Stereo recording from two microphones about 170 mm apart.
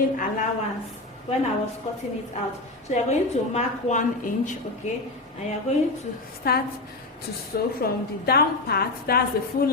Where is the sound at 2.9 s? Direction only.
40° left (ahead or behind).